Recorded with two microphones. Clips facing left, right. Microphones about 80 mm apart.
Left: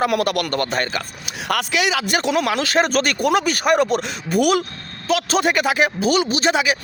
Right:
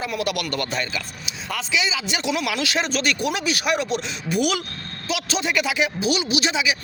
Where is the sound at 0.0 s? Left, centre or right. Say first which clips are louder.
Left 6 dB; left.